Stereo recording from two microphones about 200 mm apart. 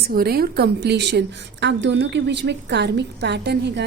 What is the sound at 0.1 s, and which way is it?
A woman's voice, 50° right (ahead or behind).